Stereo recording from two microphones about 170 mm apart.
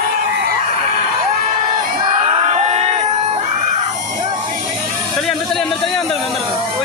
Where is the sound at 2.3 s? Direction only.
40° right (ahead or behind).